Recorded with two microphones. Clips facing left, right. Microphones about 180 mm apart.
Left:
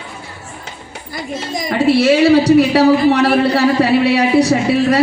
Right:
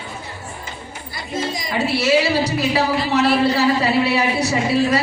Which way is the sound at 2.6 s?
65° left (ahead or behind).